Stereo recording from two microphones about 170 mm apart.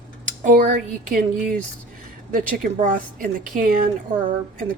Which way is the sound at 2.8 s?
55° right (ahead or behind).